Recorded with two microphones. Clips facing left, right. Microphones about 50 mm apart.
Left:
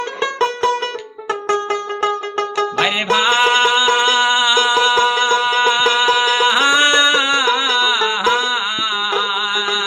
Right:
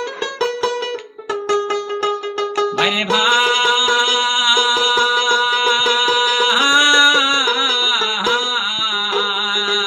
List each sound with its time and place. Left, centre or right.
0.3 s music: left
3.1 s music: left